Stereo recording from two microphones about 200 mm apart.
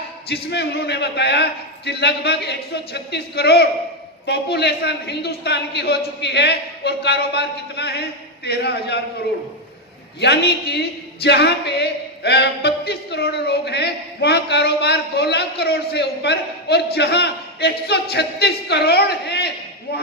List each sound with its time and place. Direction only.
0.3 s a man's voice: 55° left (ahead or behind)
10.2 s a man's voice: 55° left (ahead or behind)